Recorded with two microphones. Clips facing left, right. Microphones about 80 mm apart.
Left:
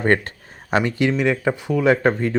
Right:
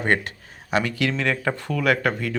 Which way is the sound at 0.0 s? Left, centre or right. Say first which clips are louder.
Left 4 dB; left.